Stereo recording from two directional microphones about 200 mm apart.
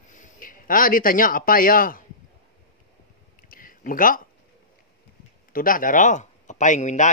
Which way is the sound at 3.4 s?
45° left (ahead or behind).